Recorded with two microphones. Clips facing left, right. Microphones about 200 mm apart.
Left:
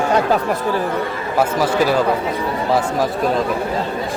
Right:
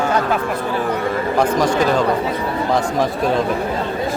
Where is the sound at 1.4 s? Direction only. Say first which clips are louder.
Left 1 dB; 5° left (ahead or behind).